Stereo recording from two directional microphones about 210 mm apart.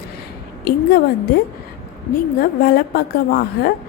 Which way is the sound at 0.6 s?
50° left (ahead or behind).